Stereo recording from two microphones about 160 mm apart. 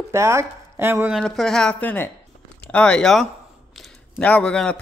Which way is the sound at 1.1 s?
Centre (ahead or behind).